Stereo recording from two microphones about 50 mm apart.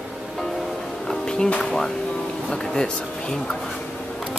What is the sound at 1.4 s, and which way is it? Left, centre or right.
Speech, left.